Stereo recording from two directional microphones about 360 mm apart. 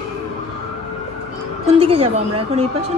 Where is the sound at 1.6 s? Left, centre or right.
Centre.